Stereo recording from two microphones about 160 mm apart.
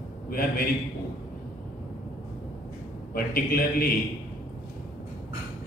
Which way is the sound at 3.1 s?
70° left (ahead or behind).